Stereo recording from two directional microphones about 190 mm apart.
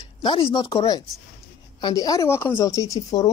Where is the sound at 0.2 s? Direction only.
25° left (ahead or behind).